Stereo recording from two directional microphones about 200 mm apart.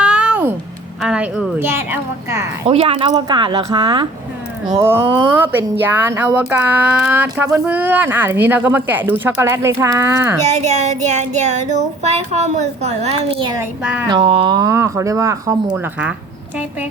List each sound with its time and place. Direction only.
0.0 s a sound: 5° right (ahead or behind)
1.0 s speech: 5° right (ahead or behind)
2.6 s speech: 30° right (ahead or behind); by 10.3 s 15° right (ahead or behind)
10.4 s a woman's voice: 35° right (ahead or behind)
13.8 s a sound: 5° right (ahead or behind)
14.1 s speech: 25° right (ahead or behind); by 16.1 s 5° right (ahead or behind)